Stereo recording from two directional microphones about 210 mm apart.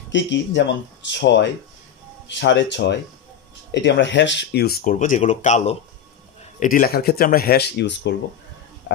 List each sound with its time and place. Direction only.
0.1 s speech: 60° left (ahead or behind)